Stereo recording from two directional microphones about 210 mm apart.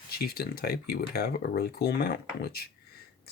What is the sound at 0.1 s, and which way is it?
Speech, 45° left (ahead or behind).